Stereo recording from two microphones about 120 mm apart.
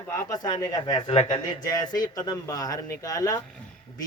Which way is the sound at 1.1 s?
55° left (ahead or behind).